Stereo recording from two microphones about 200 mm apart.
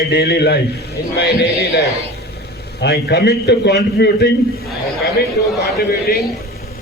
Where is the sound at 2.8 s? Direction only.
55° left (ahead or behind).